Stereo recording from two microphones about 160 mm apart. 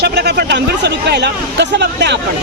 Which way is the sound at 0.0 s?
90° right.